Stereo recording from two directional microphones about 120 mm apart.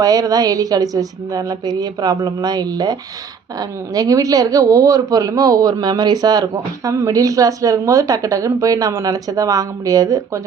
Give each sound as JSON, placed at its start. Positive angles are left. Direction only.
{"t": 0.0, "sound": "speech", "side_deg": -30}